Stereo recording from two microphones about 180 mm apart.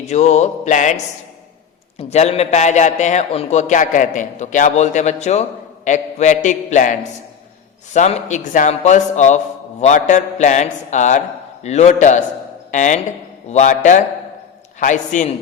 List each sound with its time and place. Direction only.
0.1 s a man's voice: 40° left (ahead or behind)
2.0 s a man's voice: 35° left (ahead or behind)